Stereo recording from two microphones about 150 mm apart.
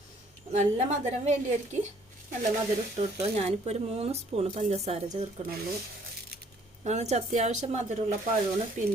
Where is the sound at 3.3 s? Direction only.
45° right (ahead or behind).